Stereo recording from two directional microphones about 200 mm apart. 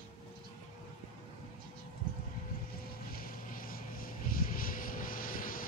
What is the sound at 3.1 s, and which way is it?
Vehicle, 45° left (ahead or behind).